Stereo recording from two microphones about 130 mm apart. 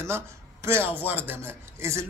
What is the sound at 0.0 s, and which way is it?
A man's voice, 20° right (ahead or behind).